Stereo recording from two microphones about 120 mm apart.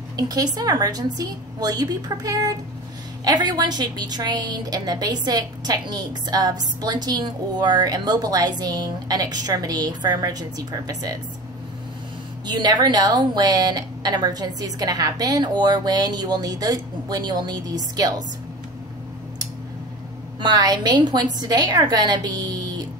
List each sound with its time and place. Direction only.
0.3 s a woman's voice: 35° right (ahead or behind)
12.4 s a woman's voice: 35° right (ahead or behind)
20.3 s a woman's voice: 35° right (ahead or behind)